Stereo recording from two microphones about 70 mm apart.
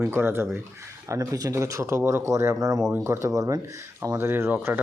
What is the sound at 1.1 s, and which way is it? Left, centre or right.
Speech, right.